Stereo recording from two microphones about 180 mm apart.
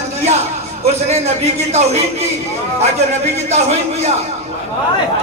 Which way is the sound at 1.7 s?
35° right (ahead or behind).